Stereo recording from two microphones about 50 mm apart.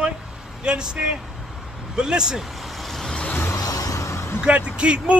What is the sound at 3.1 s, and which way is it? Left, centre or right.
Vehicle, centre.